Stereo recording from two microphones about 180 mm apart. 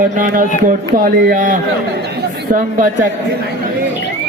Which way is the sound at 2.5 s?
45° right (ahead or behind).